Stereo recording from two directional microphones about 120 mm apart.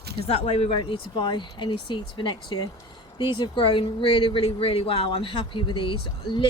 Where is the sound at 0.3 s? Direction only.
55° left (ahead or behind).